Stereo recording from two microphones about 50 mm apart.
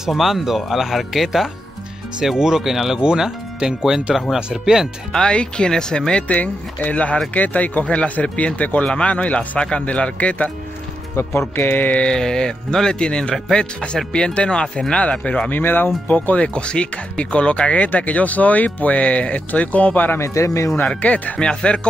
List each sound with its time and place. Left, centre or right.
0.0 s speech: centre
5.1 s speech: centre
11.1 s speech: left
12.1 s speech: centre
15.5 s speech: left
16.1 s speech: left
20.2 s speech: left
20.8 s speech: left